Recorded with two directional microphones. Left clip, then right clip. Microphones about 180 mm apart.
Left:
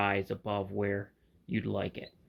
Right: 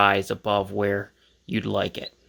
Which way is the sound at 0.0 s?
25° right (ahead or behind).